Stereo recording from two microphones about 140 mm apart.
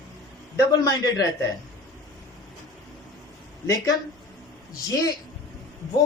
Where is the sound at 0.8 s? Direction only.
30° left (ahead or behind).